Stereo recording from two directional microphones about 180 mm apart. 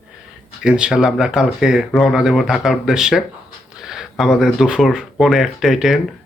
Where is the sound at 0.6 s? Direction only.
5° right (ahead or behind).